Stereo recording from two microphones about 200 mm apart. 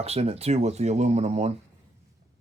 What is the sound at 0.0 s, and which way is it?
Speech, 30° right (ahead or behind).